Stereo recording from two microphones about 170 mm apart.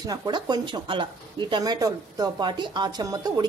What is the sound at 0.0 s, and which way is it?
A woman's voice, 20° right (ahead or behind).